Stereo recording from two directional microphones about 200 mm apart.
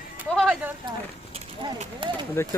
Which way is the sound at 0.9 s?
20° right (ahead or behind).